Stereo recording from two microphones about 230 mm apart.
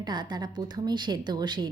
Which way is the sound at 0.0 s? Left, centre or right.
Centre.